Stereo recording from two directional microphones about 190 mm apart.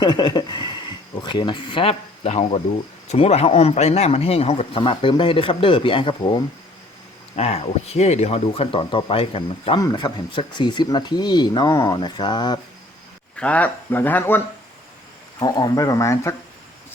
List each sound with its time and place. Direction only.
0.0 s a sound: 25° left (ahead or behind)
1.2 s speech: 25° left (ahead or behind)
13.3 s speech: 5° left (ahead or behind)
15.4 s speech: 20° left (ahead or behind)